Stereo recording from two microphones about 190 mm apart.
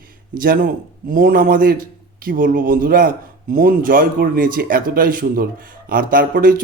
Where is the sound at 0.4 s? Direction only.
50° right (ahead or behind).